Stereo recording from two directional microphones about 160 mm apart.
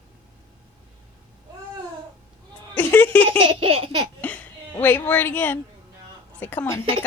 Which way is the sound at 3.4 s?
35° right (ahead or behind).